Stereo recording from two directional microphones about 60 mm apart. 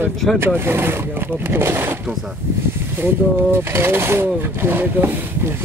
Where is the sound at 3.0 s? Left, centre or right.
Right.